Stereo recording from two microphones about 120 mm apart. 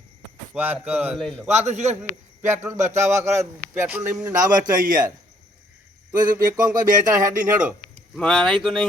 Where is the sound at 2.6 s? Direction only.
20° right (ahead or behind).